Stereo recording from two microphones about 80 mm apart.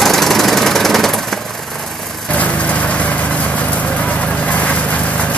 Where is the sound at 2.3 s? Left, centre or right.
Centre.